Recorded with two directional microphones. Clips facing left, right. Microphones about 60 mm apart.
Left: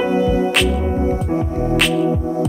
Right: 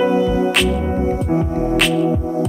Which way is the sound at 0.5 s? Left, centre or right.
Centre.